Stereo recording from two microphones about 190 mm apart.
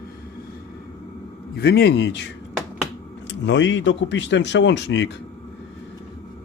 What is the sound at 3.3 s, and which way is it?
Speech, 70° left (ahead or behind).